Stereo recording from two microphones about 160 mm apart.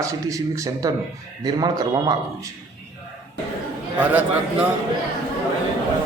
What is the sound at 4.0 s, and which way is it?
Speech, 10° right (ahead or behind).